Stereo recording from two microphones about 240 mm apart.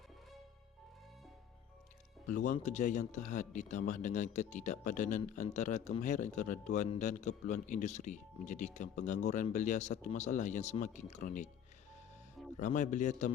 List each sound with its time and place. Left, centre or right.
2.2 s speech: left
12.5 s speech: left